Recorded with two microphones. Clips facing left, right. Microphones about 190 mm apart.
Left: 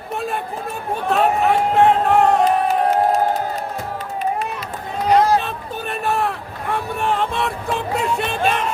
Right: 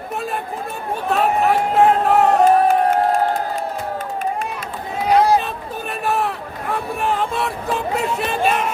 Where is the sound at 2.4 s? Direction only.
50° right (ahead or behind).